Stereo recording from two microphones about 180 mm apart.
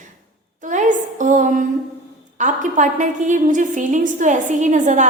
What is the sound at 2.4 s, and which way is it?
A woman's voice, 45° right (ahead or behind).